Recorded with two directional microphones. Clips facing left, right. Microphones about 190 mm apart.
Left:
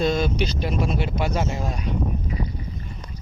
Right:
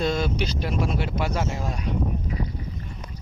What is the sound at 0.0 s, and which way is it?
Vehicle, 20° left (ahead or behind).